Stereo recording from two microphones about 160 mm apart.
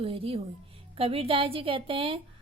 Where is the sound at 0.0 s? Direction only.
35° right (ahead or behind).